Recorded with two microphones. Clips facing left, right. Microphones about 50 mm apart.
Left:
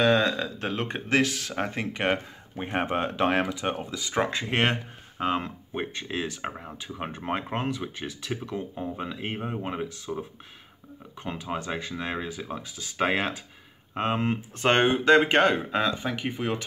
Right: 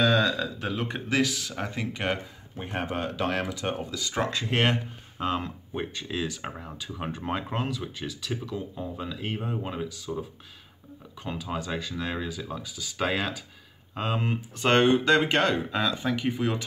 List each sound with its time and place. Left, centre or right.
0.0 s speech: left
6.5 s speech: centre
7.0 s speech: left
11.2 s speech: left
14.3 s speech: left